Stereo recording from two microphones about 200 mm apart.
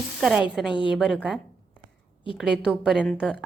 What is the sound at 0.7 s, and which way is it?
Speech, 25° left (ahead or behind).